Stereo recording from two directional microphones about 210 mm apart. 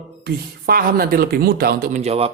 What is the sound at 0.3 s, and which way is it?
A woman's voice, 45° right (ahead or behind).